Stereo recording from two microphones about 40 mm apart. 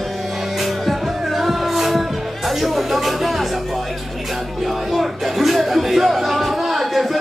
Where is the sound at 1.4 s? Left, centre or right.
Centre.